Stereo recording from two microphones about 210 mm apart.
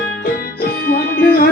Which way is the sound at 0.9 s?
45° left (ahead or behind).